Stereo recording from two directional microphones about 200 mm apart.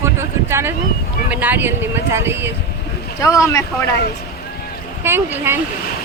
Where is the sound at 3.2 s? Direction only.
15° left (ahead or behind).